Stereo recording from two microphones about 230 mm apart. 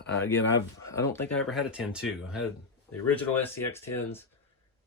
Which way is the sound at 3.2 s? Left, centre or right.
Centre.